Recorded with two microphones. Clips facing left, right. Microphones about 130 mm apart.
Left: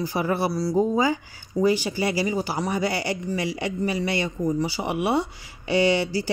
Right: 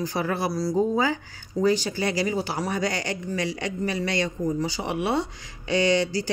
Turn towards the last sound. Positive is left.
turn(degrees=10)  # may be behind; listen again after turning